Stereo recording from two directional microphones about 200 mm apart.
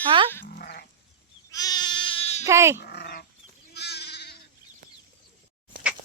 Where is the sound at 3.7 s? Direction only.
55° left (ahead or behind).